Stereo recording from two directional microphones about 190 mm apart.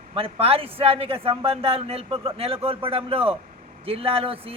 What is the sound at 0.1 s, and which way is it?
A man's voice, 30° right (ahead or behind).